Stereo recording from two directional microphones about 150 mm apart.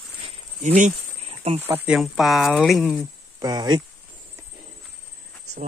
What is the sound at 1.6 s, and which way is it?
Speech, 15° right (ahead or behind).